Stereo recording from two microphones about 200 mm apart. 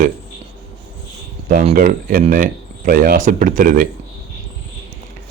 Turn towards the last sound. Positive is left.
turn(degrees=-40)  # may be behind; listen again after turning